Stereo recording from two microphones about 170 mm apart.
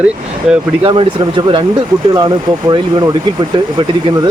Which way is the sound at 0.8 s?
30° right (ahead or behind).